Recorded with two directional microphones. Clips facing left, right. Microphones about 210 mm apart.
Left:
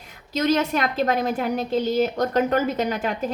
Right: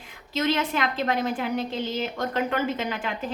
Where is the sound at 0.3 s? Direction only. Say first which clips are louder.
Left 4 dB; 40° left (ahead or behind).